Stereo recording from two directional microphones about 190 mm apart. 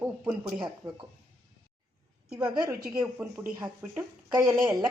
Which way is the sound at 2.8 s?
10° right (ahead or behind).